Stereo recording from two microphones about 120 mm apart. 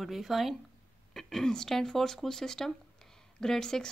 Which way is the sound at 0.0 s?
Centre (ahead or behind).